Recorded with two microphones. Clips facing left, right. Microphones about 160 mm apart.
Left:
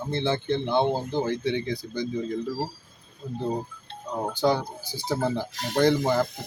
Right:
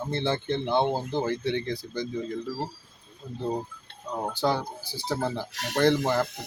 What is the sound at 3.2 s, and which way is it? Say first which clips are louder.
Speech: left 5 dB; 5° left (ahead or behind).